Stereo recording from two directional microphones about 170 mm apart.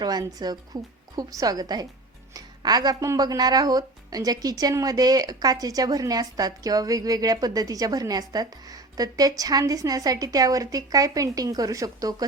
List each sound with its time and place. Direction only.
0.0 s speech: 25° right (ahead or behind)